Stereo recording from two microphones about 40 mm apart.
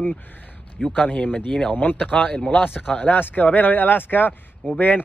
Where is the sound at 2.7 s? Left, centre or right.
Left.